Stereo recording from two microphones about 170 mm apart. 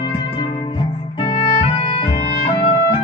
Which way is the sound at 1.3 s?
30° left (ahead or behind).